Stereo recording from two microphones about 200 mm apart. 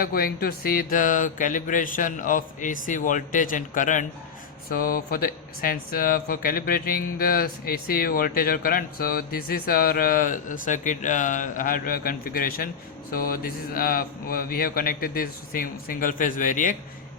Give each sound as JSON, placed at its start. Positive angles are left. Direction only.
{"t": 0.0, "sound": "speech", "side_deg": 50}